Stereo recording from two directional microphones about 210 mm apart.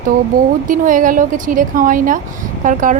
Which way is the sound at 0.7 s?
40° right (ahead or behind).